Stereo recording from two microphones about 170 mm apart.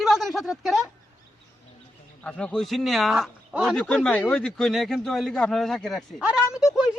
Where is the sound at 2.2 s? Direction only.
5° left (ahead or behind).